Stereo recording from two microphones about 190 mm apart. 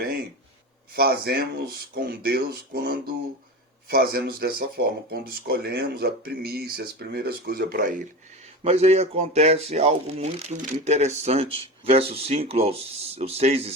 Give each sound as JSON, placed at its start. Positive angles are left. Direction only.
{"t": 0.9, "sound": "speech", "side_deg": -55}
{"t": 8.6, "sound": "speech", "side_deg": -35}